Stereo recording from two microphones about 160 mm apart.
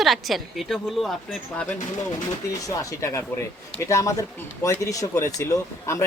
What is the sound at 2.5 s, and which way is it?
A woman's voice, 20° left (ahead or behind).